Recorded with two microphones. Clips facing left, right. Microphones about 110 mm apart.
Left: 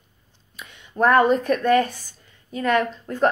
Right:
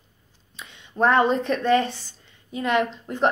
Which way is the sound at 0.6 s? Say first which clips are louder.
Left 1 dB; 25° right (ahead or behind).